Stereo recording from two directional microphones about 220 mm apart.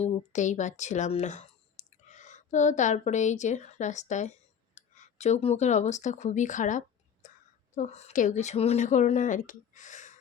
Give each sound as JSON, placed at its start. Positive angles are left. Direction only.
{"t": 0.0, "sound": "a woman's voice", "side_deg": 35}